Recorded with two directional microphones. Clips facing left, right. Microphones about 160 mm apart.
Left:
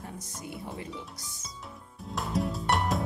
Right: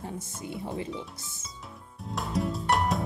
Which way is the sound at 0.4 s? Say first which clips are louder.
Right 4 dB; 25° right (ahead or behind).